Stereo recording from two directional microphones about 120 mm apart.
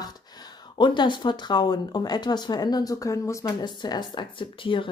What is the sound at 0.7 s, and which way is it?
Speech, 40° left (ahead or behind).